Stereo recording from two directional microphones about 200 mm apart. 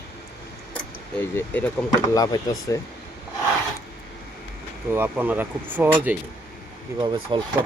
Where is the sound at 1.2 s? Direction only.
10° left (ahead or behind).